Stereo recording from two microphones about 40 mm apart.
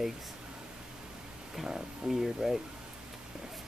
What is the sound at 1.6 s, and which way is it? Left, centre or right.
Speech, centre.